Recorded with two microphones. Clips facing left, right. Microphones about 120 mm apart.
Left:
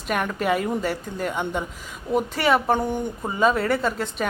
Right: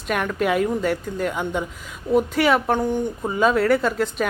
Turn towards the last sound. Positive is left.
turn(degrees=0)  # may be behind; listen again after turning